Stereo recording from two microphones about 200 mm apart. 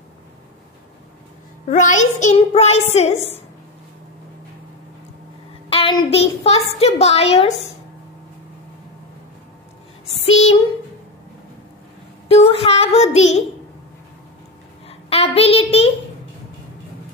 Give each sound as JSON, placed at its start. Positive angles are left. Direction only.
{"t": 1.7, "sound": "a child's voice", "side_deg": 40}
{"t": 5.7, "sound": "child singing", "side_deg": 25}
{"t": 6.8, "sound": "a child's voice", "side_deg": 30}
{"t": 12.3, "sound": "a child's voice", "side_deg": 30}
{"t": 14.9, "sound": "a child's voice", "side_deg": 30}